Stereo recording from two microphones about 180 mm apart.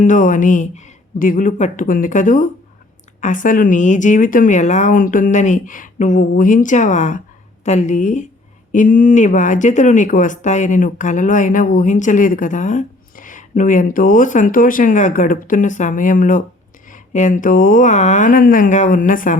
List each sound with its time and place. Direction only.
0.0 s speech: 45° left (ahead or behind)